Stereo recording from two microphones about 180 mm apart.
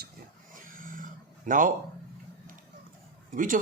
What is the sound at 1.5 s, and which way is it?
Speech, 50° right (ahead or behind).